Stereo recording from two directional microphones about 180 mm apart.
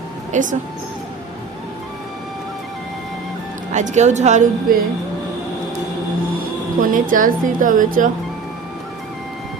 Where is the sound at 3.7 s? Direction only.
40° right (ahead or behind).